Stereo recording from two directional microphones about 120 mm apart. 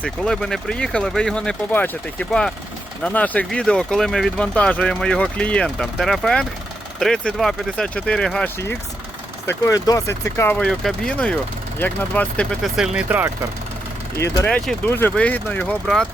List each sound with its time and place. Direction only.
0.0 s speech: 5° left (ahead or behind)
9.5 s speech: 30° left (ahead or behind)
10.6 s speech: 5° left (ahead or behind); by 13.2 s 10° right (ahead or behind)
14.4 s speech: 10° left (ahead or behind)